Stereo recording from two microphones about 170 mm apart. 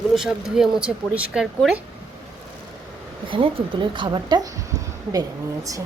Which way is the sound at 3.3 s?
30° right (ahead or behind).